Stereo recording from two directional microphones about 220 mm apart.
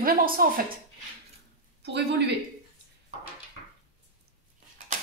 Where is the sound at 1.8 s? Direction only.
50° right (ahead or behind).